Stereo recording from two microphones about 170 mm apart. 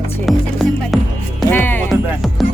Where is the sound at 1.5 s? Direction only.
10° left (ahead or behind).